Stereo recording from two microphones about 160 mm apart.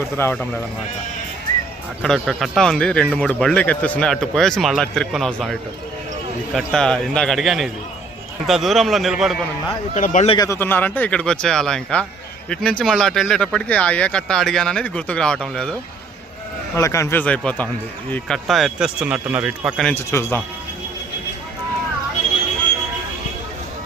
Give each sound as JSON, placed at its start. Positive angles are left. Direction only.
{"t": 0.2, "sound": "speech", "side_deg": 10}
{"t": 2.0, "sound": "speech", "side_deg": 0}
{"t": 9.9, "sound": "speech", "side_deg": 50}
{"t": 10.3, "sound": "speech", "side_deg": 20}
{"t": 16.7, "sound": "speech", "side_deg": 20}
{"t": 19.8, "sound": "speech", "side_deg": 15}